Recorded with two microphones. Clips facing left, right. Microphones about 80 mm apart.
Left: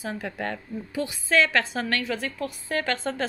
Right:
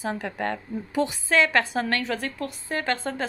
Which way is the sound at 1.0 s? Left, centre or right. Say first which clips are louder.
Right 1 dB; right.